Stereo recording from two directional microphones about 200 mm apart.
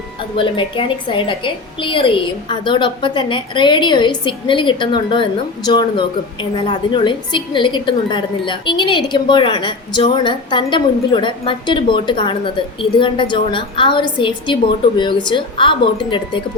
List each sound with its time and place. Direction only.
0.3 s a woman's voice: 25° left (ahead or behind)